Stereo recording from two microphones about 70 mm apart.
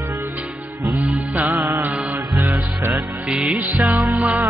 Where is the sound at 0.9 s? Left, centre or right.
Centre.